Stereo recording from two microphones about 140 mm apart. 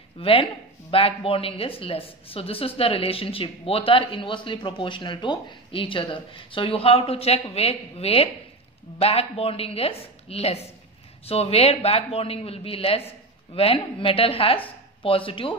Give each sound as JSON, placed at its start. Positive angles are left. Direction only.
{"t": 0.2, "sound": "a man's voice", "side_deg": 40}